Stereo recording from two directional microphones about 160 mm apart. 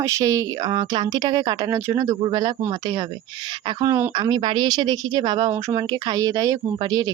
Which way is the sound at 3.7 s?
20° right (ahead or behind).